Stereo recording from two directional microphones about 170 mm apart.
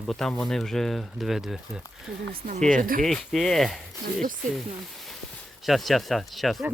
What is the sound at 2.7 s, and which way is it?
Speech, 55° right (ahead or behind).